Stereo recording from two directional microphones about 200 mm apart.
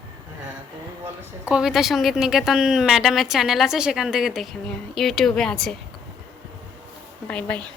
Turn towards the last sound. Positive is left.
turn(degrees=5)  # may be behind; listen again after turning